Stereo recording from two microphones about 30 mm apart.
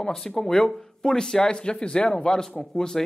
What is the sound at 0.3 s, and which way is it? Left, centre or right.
A man's voice, left.